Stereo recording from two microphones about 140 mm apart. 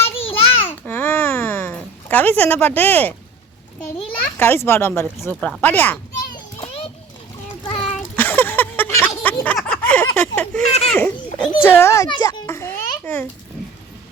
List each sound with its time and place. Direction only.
0.0 s babbling: 40° left (ahead or behind)
0.9 s a sound: 15° left (ahead or behind)
4.4 s a child's voice: 15° left (ahead or behind)
6.6 s a sound: 45° left (ahead or behind)
7.9 s a sound: 10° left (ahead or behind)
10.9 s children playing: 10° left (ahead or behind)
11.6 s a child's voice: 15° left (ahead or behind)
12.0 s a child's voice: 30° left (ahead or behind)
12.5 s babbling: 20° left (ahead or behind)